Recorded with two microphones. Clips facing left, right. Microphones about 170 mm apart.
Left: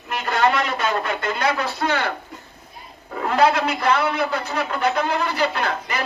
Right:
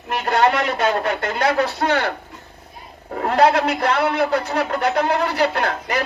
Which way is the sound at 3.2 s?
60° right (ahead or behind).